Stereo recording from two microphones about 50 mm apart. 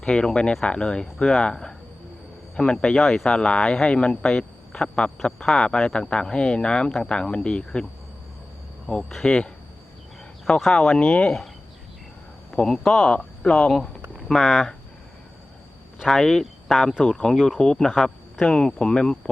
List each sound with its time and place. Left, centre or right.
0.0 s speech: centre
3.2 s speech: centre
8.9 s speech: centre
10.6 s speech: centre
12.6 s speech: centre
14.3 s speech: centre
16.0 s speech: centre